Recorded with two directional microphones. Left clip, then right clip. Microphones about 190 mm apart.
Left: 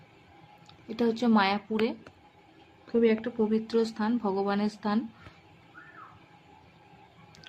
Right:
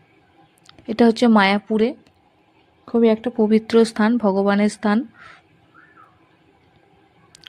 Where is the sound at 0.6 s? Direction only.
50° right (ahead or behind).